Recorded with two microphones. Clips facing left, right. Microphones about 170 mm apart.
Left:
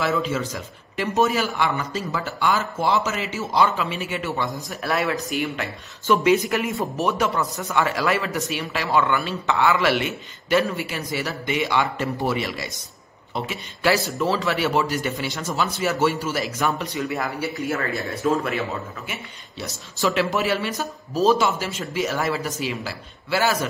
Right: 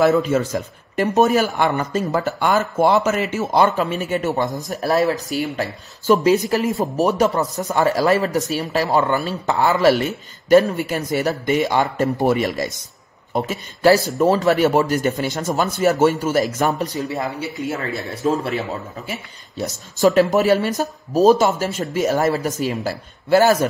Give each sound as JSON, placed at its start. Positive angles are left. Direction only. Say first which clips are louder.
{"t": 0.0, "sound": "speech", "louder": "right 8 dB", "side_deg": -50}
{"t": 17.0, "sound": "speech", "louder": "right 2 dB", "side_deg": -25}
{"t": 18.2, "sound": "speech", "louder": "right 2 dB", "side_deg": -30}
{"t": 19.5, "sound": "speech", "louder": "right 8 dB", "side_deg": -45}